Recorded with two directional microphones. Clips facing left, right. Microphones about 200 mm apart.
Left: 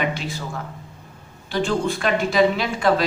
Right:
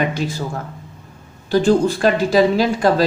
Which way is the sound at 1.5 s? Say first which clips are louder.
Right 7 dB; 40° right (ahead or behind).